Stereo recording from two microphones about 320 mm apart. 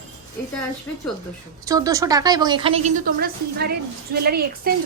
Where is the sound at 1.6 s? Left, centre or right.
Centre.